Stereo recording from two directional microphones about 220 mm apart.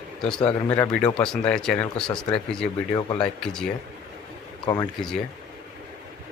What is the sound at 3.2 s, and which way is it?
Speech, 5° left (ahead or behind).